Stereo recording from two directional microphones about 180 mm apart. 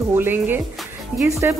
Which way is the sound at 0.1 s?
10° right (ahead or behind).